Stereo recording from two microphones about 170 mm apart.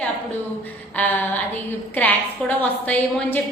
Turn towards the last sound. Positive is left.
turn(degrees=10)  # may be behind; listen again after turning